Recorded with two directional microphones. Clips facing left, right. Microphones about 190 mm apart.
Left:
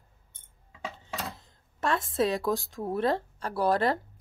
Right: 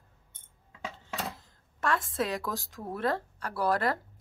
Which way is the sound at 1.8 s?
25° left (ahead or behind).